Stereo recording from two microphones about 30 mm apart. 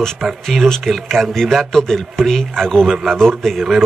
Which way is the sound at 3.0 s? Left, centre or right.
Centre.